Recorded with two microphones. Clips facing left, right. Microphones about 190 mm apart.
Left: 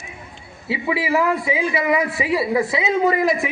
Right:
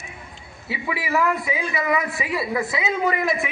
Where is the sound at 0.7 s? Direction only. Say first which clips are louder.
Left 4 dB; 25° left (ahead or behind).